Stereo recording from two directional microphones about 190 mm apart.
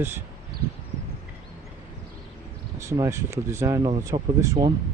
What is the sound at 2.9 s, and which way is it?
Speech, 15° right (ahead or behind).